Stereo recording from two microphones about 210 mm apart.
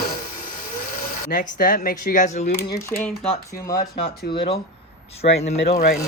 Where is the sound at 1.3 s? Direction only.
40° left (ahead or behind).